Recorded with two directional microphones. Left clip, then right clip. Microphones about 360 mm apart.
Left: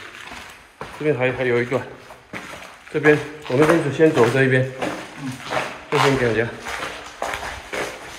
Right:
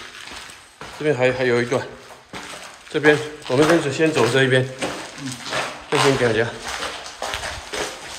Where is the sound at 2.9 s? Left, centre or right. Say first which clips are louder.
Even; centre.